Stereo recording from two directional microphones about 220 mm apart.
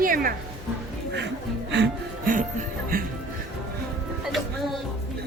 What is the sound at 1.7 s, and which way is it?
Music, 50° right (ahead or behind).